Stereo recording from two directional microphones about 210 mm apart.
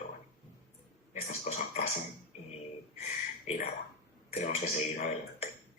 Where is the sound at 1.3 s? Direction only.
30° left (ahead or behind).